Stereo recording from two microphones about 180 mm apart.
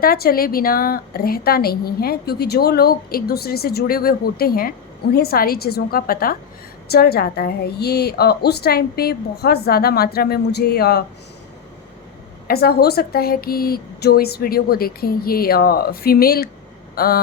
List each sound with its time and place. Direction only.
0.0 s a woman's voice: 55° left (ahead or behind)
12.5 s a woman's voice: 60° left (ahead or behind)
16.9 s vehicle: 55° left (ahead or behind)